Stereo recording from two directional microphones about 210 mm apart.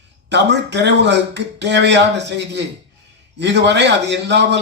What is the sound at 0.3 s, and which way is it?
Speech, 55° right (ahead or behind).